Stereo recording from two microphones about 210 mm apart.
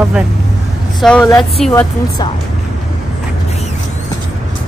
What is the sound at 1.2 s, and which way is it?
Speech, 15° left (ahead or behind).